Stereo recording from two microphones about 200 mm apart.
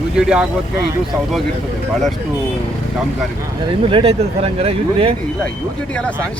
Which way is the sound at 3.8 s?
25° right (ahead or behind).